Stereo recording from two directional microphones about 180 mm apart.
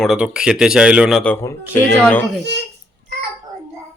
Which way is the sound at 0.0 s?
5° right (ahead or behind).